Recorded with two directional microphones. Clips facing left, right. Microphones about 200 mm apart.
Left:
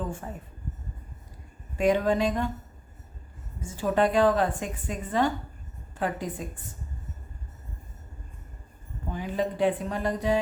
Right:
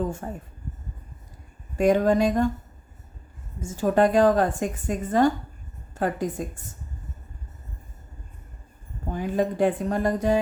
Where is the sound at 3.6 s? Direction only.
45° right (ahead or behind).